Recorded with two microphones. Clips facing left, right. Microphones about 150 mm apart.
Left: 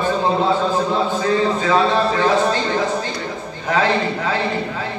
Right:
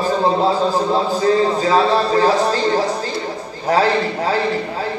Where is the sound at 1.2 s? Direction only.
35° right (ahead or behind).